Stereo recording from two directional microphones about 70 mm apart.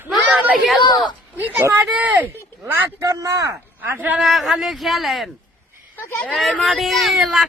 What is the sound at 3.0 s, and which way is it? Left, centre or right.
Speech, right.